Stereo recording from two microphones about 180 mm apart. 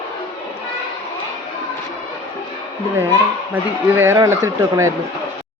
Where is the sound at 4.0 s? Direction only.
15° right (ahead or behind).